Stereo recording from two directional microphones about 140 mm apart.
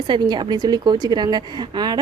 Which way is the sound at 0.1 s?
30° right (ahead or behind).